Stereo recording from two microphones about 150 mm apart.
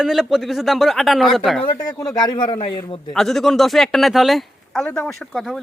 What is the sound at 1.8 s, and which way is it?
A man's voice, 25° left (ahead or behind).